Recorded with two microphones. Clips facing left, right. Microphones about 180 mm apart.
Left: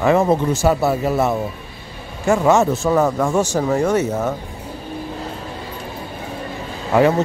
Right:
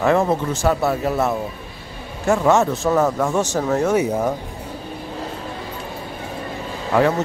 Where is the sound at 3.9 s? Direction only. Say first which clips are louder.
Even; 10° right (ahead or behind).